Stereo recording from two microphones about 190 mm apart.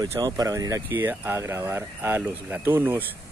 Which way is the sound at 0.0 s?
20° right (ahead or behind).